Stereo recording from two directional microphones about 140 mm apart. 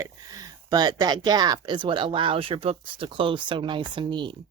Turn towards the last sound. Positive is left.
turn(degrees=-35)  # may be behind; listen again after turning